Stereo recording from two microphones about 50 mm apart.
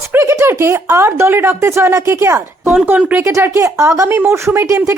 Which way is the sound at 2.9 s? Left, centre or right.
Right.